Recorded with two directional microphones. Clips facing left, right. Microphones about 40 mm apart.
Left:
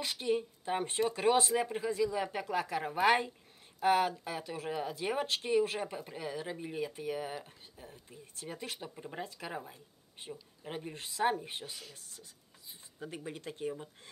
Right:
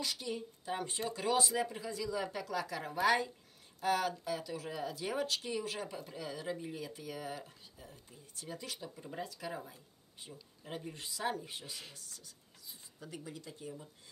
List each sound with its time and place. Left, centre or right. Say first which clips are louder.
0.0 s speech: left 6 dB; left